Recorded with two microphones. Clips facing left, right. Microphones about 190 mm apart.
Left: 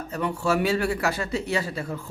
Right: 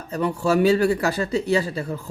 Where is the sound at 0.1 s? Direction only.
35° right (ahead or behind).